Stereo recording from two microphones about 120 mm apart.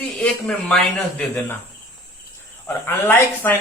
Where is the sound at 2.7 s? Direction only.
20° left (ahead or behind).